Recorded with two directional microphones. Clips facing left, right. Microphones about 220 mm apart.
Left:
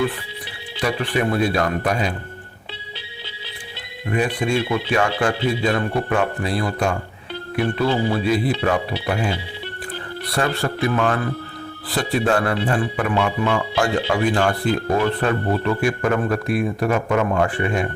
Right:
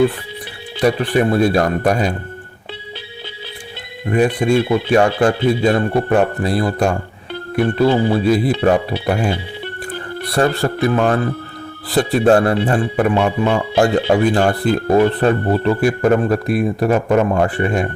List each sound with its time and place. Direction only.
0.8 s speech: 45° right (ahead or behind)
4.0 s speech: 40° right (ahead or behind)